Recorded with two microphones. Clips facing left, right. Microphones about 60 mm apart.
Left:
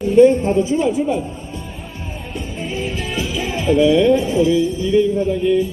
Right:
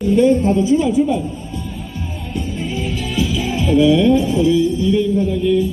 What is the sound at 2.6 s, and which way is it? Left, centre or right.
Music, left.